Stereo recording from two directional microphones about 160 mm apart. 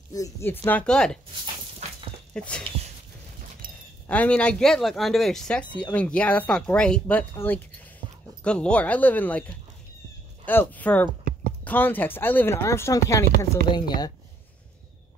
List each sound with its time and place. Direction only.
0.1 s speech: 20° left (ahead or behind)
0.7 s speech: 5° left (ahead or behind)
1.8 s dog: 45° right (ahead or behind)
2.3 s speech: 5° left (ahead or behind)
3.6 s a sound: 60° right (ahead or behind)
4.1 s speech: 10° left (ahead or behind)
10.4 s speech: 10° left (ahead or behind); by 14.1 s 25° left (ahead or behind)